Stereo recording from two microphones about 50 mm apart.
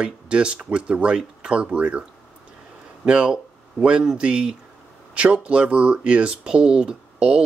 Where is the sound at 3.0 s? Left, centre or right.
Centre.